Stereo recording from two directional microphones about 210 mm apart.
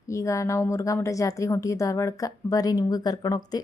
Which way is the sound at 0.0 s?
15° left (ahead or behind).